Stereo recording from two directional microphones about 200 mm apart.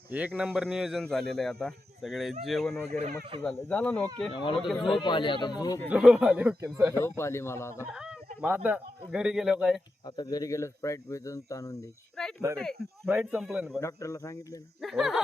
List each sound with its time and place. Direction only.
0.1 s a man's voice: 5° right (ahead or behind)
4.3 s a man's voice: 25° left (ahead or behind)
4.5 s a man's voice: centre (ahead or behind)
4.9 s a man's voice: 25° left (ahead or behind)
5.9 s speech: 5° right (ahead or behind)
7.0 s speech: 15° left (ahead or behind)
7.9 s speech: 5° right (ahead or behind)
10.2 s speech: 20° left (ahead or behind)
12.2 s a sound: centre (ahead or behind)
13.1 s a man's voice: 5° right (ahead or behind)
13.7 s speech: 15° left (ahead or behind)
14.8 s a man's voice: centre (ahead or behind)